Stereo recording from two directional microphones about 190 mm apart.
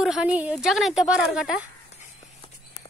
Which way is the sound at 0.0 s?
5° right (ahead or behind).